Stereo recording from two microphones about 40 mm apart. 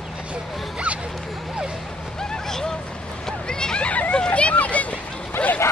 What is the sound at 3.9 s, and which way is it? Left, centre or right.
Hubbub, left.